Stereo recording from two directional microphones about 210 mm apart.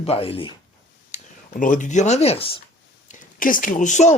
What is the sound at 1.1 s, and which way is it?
Speech, 40° left (ahead or behind).